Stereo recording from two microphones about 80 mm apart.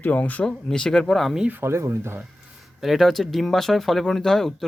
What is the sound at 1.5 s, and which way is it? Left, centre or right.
Speech, right.